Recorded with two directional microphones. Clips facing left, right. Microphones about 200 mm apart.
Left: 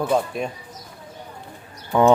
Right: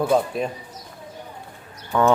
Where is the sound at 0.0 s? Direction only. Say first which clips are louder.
Right 2 dB; centre (ahead or behind).